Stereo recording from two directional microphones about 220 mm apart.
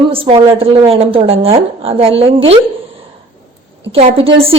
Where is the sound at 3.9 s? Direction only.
25° right (ahead or behind).